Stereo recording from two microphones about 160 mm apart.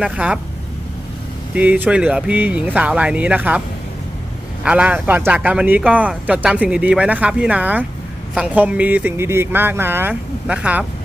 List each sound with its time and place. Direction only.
0.0 s speech: 5° right (ahead or behind)
1.5 s speech: 10° right (ahead or behind)
4.6 s speech: 10° right (ahead or behind)